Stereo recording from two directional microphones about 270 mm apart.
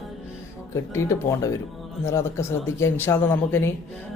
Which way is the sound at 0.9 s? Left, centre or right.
Centre.